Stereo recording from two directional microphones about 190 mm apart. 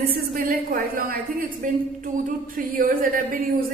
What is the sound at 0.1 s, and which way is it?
A woman's voice, 50° right (ahead or behind).